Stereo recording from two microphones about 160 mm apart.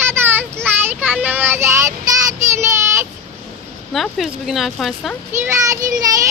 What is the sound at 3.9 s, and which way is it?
Speech, centre (ahead or behind).